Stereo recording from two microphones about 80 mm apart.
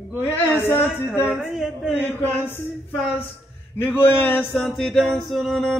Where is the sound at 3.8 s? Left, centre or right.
Left.